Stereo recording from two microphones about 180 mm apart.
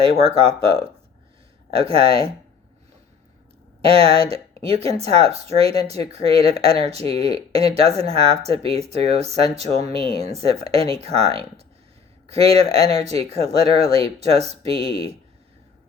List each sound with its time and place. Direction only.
0.0 s speech: 30° right (ahead or behind)
3.8 s speech: 30° right (ahead or behind)